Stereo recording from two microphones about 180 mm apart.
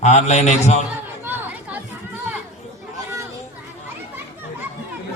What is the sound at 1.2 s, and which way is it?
Chatter, 10° right (ahead or behind).